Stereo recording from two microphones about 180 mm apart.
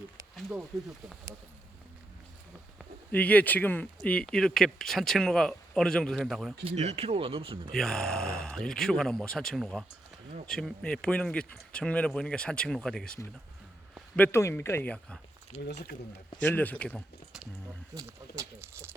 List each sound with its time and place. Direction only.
3.1 s speech: 10° left (ahead or behind)
6.7 s speech: 35° right (ahead or behind)
7.7 s speech: centre (ahead or behind)
14.2 s speech: 15° left (ahead or behind)
15.6 s speech: 70° left (ahead or behind)
16.4 s speech: 10° left (ahead or behind)
17.9 s speech: 20° right (ahead or behind)